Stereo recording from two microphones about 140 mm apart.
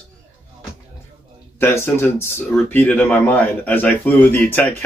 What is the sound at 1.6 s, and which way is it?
Speech, 15° left (ahead or behind).